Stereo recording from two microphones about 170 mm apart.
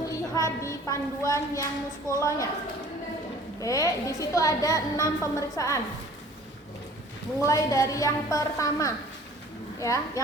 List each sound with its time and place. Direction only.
0.0 s a sound: 20° left (ahead or behind)
2.0 s a woman's voice: 15° left (ahead or behind)
3.6 s a woman's voice: 20° left (ahead or behind)
7.4 s a woman's voice: 20° left (ahead or behind)